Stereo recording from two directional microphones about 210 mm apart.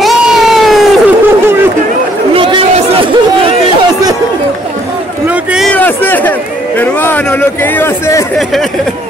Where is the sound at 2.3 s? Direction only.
25° right (ahead or behind).